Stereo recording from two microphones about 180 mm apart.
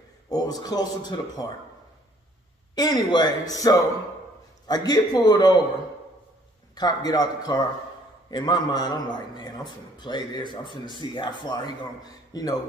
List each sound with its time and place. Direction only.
0.3 s a man's voice: 20° left (ahead or behind)
2.7 s a man's voice: 20° left (ahead or behind)
6.7 s a man's voice: 20° left (ahead or behind)